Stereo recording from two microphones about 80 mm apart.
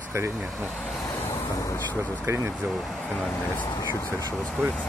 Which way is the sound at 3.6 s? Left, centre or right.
Left.